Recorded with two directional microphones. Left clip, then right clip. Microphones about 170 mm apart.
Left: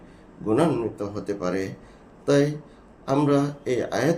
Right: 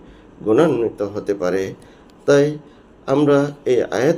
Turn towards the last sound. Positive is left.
turn(degrees=15)  # may be behind; listen again after turning